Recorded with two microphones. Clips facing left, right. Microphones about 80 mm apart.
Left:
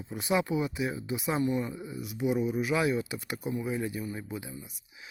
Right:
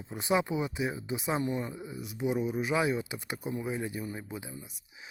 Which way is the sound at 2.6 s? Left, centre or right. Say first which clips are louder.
Left 1 dB; right.